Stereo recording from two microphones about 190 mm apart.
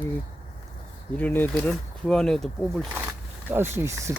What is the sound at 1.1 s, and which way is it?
Speech, 10° left (ahead or behind).